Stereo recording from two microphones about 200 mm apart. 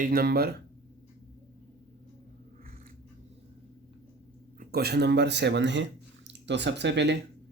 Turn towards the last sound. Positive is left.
turn(degrees=-60)  # may be behind; listen again after turning